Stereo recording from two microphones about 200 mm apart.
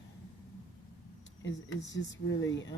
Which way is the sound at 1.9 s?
65° left (ahead or behind).